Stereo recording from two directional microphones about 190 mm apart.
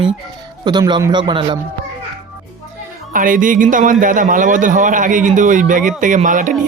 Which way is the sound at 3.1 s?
45° right (ahead or behind).